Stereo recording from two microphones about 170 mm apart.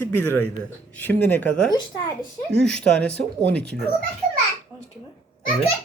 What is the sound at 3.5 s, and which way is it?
Speech, 5° left (ahead or behind).